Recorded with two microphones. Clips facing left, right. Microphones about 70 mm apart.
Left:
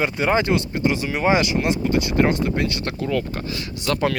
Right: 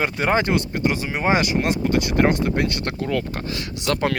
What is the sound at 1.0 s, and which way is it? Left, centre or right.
Speech, right.